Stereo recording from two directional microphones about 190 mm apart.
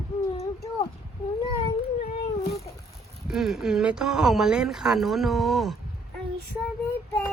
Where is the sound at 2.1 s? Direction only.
50° left (ahead or behind).